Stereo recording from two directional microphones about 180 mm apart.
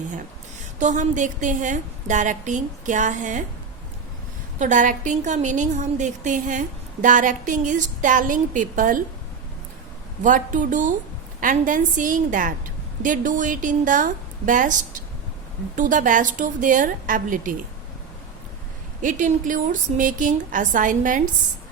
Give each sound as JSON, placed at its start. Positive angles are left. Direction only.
{"t": 0.8, "sound": "a woman's voice", "side_deg": -45}
{"t": 4.6, "sound": "a woman's voice", "side_deg": -45}
{"t": 10.2, "sound": "a woman's voice", "side_deg": -45}
{"t": 15.7, "sound": "a woman's voice", "side_deg": -45}
{"t": 19.0, "sound": "a woman's voice", "side_deg": -45}